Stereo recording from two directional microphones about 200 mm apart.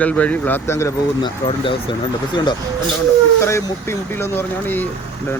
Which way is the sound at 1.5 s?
25° left (ahead or behind).